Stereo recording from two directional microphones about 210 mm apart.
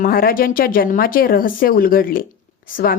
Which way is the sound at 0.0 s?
45° left (ahead or behind).